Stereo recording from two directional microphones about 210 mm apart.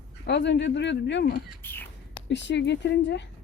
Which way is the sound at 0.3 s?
55° left (ahead or behind).